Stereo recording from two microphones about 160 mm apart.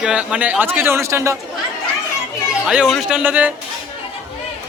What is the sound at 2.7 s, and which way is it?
Speech, 5° right (ahead or behind).